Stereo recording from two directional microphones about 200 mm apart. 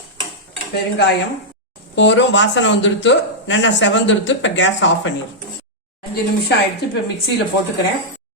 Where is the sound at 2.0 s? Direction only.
65° left (ahead or behind).